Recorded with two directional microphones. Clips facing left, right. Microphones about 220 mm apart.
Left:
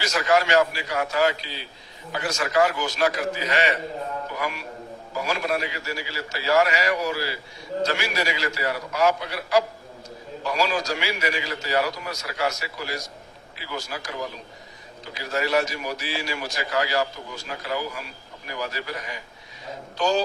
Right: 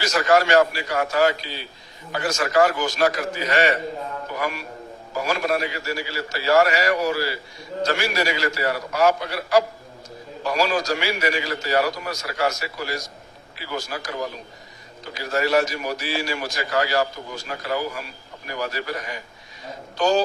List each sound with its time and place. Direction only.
0.0 s a man's voice: 45° right (ahead or behind)